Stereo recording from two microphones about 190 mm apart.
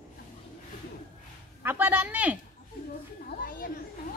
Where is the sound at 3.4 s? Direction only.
50° left (ahead or behind).